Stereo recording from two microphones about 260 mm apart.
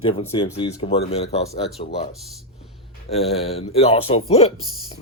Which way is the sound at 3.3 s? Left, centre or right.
Left.